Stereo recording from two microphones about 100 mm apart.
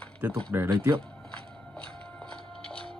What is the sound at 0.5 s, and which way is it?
Speech, 20° right (ahead or behind).